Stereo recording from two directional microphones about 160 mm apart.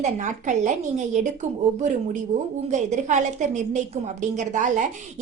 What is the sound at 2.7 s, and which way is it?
A woman's voice, 50° right (ahead or behind).